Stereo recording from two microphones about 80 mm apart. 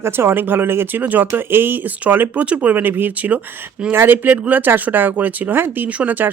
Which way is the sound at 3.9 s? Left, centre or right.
Right.